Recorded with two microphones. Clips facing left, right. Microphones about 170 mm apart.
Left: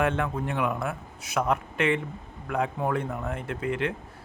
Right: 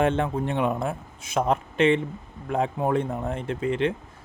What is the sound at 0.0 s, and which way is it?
Speech, 25° right (ahead or behind).